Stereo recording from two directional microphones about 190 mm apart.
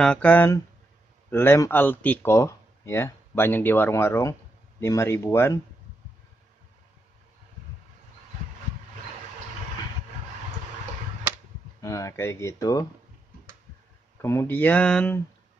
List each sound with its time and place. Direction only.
0.0 s speech: 5° left (ahead or behind)
11.8 s speech: 15° left (ahead or behind)
14.2 s speech: 15° left (ahead or behind)